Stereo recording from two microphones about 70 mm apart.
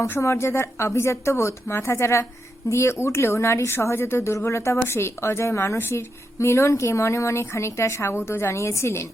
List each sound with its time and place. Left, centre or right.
0.2 s a woman's voice: left